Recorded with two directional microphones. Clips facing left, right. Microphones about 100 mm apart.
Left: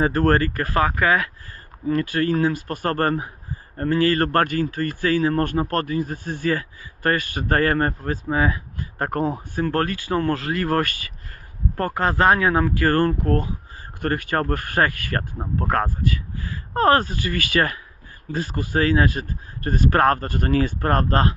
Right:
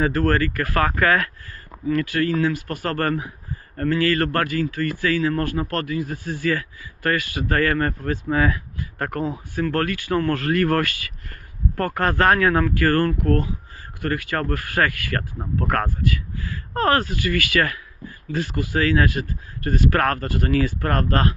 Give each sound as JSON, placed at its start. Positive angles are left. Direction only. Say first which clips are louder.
{"t": 0.0, "sound": "speech", "louder": "left 1 dB", "side_deg": 35}
{"t": 0.7, "sound": "speech", "louder": "even", "side_deg": 15}
{"t": 2.1, "sound": "speech", "louder": "left 1 dB", "side_deg": 40}
{"t": 4.4, "sound": "speech", "louder": "even", "side_deg": 50}
{"t": 5.1, "sound": "speech", "louder": "left 5 dB", "side_deg": 30}
{"t": 6.5, "sound": "speech", "louder": "left 2 dB", "side_deg": 30}
{"t": 14.0, "sound": "speech", "louder": "left 2 dB", "side_deg": 40}
{"t": 18.3, "sound": "speech", "louder": "right 1 dB", "side_deg": 35}